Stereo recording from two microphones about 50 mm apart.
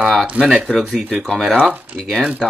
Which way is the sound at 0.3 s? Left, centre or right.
Right.